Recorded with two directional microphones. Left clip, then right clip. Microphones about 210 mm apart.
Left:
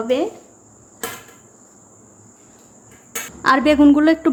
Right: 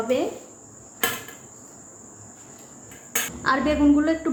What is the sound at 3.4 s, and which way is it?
Speech, 40° left (ahead or behind).